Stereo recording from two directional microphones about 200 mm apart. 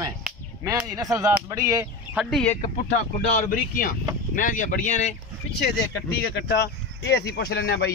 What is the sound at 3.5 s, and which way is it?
Speech, 45° left (ahead or behind).